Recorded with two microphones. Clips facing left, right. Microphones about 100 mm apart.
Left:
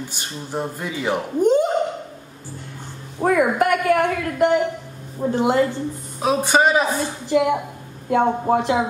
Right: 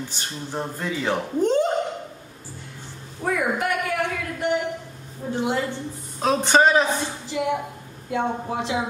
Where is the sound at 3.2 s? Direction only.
50° left (ahead or behind).